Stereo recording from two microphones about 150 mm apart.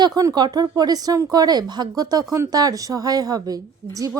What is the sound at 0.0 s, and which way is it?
A woman's voice, 25° right (ahead or behind).